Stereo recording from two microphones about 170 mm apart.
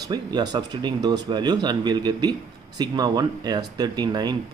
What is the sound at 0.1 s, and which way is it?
Speech, 25° right (ahead or behind).